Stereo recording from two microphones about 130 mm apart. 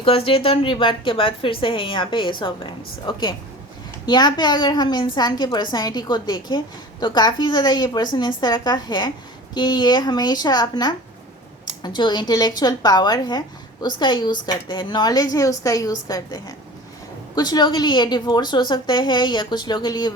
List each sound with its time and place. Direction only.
0.0 s a woman's voice: 45° left (ahead or behind)